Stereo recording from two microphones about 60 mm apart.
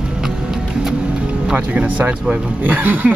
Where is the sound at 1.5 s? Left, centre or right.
Right.